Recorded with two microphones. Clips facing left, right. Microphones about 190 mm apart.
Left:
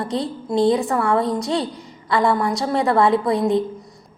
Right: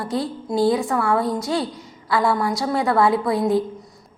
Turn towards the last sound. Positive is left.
turn(degrees=-5)  # may be behind; listen again after turning